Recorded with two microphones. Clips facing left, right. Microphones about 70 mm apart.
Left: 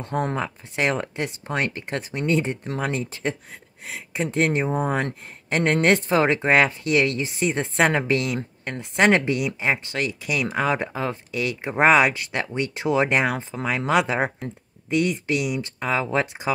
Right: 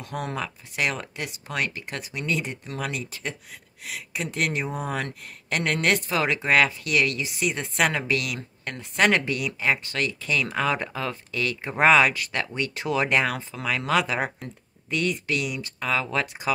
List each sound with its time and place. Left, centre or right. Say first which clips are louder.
0.0 s speech: left 5 dB; left